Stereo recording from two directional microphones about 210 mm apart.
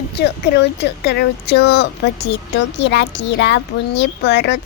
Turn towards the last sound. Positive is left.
turn(degrees=55)  # may be behind; listen again after turning